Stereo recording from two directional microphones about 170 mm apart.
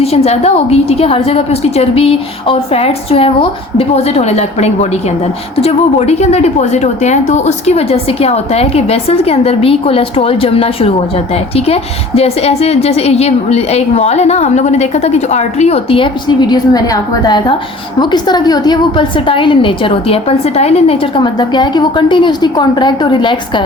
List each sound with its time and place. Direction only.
0.0 s a woman's voice: 35° left (ahead or behind)
16.5 s a woman's voice: 20° left (ahead or behind)